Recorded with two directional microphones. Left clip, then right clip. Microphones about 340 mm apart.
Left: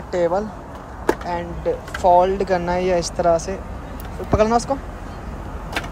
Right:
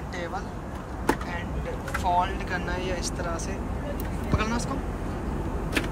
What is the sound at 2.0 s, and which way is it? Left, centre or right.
Speech, centre.